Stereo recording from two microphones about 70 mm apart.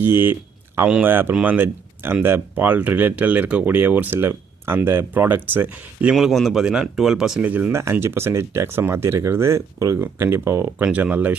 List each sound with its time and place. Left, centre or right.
0.0 s speech: right
6.1 s speech: centre
7.4 s speech: right
7.7 s speech: right
10.8 s speech: right